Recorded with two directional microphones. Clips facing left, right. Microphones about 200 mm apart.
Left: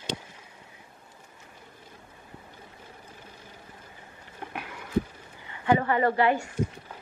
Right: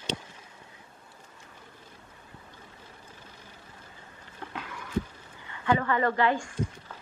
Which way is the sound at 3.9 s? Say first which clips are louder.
Left 2 dB; 15° left (ahead or behind).